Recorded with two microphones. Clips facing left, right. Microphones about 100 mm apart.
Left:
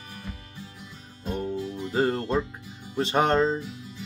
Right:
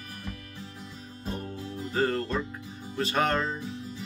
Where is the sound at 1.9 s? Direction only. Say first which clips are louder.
Left 3 dB; 25° left (ahead or behind).